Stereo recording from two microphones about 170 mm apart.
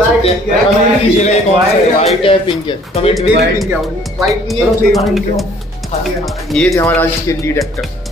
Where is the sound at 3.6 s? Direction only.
Centre (ahead or behind).